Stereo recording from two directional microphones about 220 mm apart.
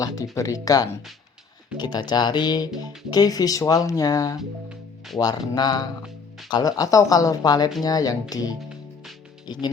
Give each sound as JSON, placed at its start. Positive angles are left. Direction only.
{"t": 0.0, "sound": "speech", "side_deg": 15}
{"t": 4.4, "sound": "music", "side_deg": 0}
{"t": 5.2, "sound": "speech", "side_deg": 20}